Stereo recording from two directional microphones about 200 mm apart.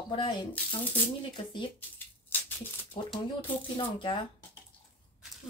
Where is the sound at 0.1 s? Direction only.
25° left (ahead or behind).